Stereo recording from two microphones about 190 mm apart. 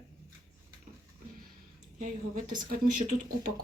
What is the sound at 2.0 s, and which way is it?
Speech, 45° right (ahead or behind).